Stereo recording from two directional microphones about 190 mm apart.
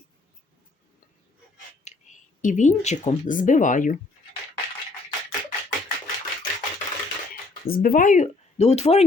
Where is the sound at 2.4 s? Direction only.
40° left (ahead or behind).